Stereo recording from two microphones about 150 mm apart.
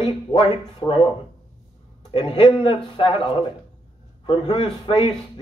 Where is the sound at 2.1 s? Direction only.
35° left (ahead or behind).